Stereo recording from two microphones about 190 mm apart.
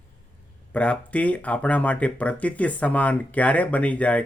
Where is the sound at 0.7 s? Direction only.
5° left (ahead or behind).